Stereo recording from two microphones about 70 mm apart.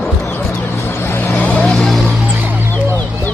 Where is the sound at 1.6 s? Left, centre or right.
Centre.